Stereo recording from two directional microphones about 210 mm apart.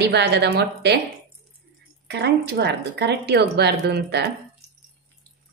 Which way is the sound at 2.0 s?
50° right (ahead or behind).